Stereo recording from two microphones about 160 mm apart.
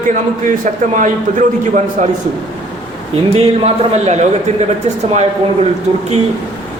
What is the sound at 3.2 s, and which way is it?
A man's voice, 40° right (ahead or behind).